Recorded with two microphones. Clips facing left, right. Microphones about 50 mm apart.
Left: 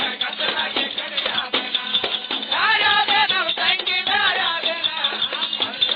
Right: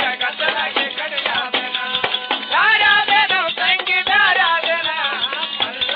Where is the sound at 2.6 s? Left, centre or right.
Right.